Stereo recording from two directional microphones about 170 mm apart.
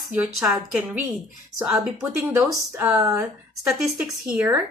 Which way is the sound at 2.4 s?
5° right (ahead or behind).